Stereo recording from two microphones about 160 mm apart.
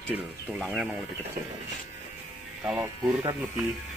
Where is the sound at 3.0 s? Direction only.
25° right (ahead or behind).